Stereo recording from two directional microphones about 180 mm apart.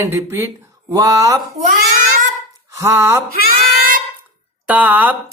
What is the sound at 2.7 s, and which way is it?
Speech, 15° right (ahead or behind).